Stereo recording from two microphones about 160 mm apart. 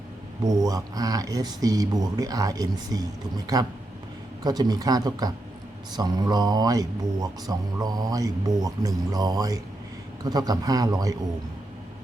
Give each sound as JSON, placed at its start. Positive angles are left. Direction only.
{"t": 0.4, "sound": "speech", "side_deg": -25}